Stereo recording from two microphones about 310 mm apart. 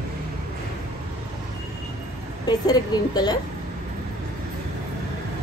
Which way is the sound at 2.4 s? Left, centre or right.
Centre.